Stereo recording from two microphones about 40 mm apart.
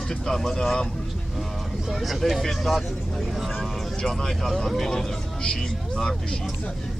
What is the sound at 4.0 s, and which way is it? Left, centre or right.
Speech, centre.